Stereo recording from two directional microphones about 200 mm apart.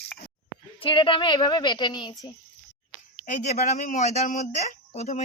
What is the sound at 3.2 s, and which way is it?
Speech, 40° left (ahead or behind).